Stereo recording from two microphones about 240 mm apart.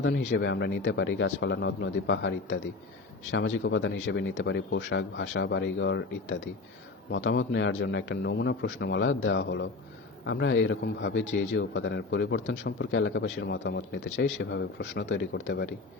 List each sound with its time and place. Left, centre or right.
0.0 s a man's voice: left